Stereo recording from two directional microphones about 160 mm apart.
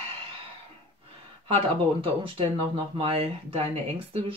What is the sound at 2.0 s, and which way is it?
Speech, 35° right (ahead or behind).